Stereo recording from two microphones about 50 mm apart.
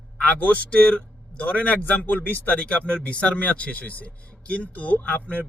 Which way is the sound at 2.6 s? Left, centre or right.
Left.